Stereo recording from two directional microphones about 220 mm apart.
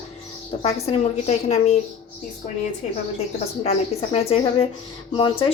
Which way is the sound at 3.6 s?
25° left (ahead or behind).